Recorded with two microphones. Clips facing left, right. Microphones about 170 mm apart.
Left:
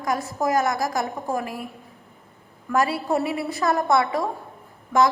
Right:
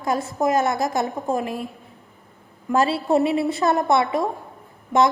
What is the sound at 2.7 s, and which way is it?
A woman's voice, 25° right (ahead or behind).